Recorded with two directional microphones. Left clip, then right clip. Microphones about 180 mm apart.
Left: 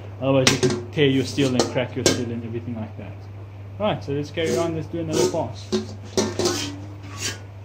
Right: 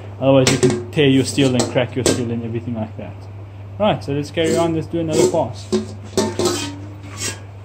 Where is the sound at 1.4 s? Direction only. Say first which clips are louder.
Right 4 dB; centre (ahead or behind).